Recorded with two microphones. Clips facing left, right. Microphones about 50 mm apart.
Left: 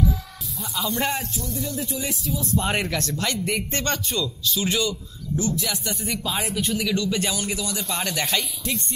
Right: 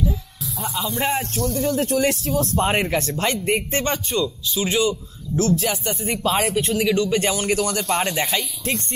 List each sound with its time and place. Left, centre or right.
0.7 s music: centre
1.3 s speech: right
2.6 s a man's voice: right
5.4 s a man's voice: right
5.9 s a man's voice: right
7.5 s a man's voice: right
8.1 s a man's voice: right